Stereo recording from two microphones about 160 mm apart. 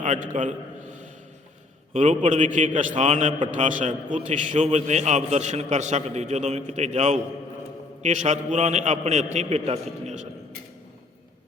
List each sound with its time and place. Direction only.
0.0 s a man's voice: 50° right (ahead or behind)
1.9 s a man's voice: 45° right (ahead or behind)